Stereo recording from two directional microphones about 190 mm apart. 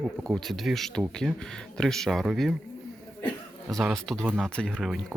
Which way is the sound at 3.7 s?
Centre (ahead or behind).